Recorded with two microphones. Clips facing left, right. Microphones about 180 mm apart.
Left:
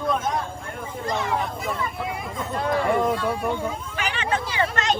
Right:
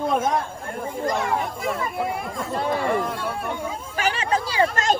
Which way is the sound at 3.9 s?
35° right (ahead or behind).